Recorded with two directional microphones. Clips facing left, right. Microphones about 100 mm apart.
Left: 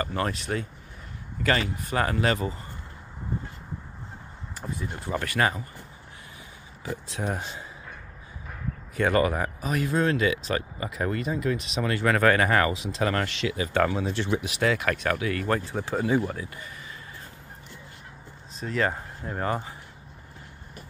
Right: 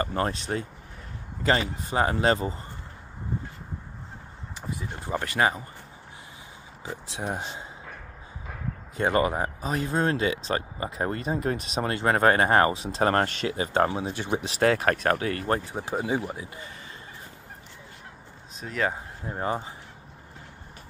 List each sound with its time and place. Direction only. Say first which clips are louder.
0.0 s a man's voice: right 1 dB; 35° right (ahead or behind)
4.7 s a man's voice: even; 20° right (ahead or behind)
6.8 s a man's voice: left 2 dB; 20° right (ahead or behind)
7.4 s speech: right 1 dB; 30° right (ahead or behind)
8.9 s speech: left 1 dB; 25° right (ahead or behind); by 13.7 s 40° right (ahead or behind)
13.7 s a man's voice: left 1 dB; 25° right (ahead or behind)
14.4 s speech: right 3 dB; 40° right (ahead or behind)
15.6 s a man's voice: left 2 dB; 20° right (ahead or behind)
18.6 s speech: left 2 dB; 5° right (ahead or behind)
19.2 s a man's voice: even; 20° right (ahead or behind)